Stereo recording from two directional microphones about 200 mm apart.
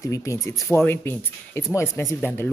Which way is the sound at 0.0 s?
15° left (ahead or behind).